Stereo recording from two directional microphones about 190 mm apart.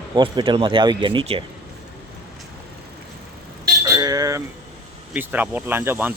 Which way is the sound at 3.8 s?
20° right (ahead or behind).